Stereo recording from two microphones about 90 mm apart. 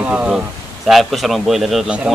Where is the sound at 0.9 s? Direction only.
Centre (ahead or behind).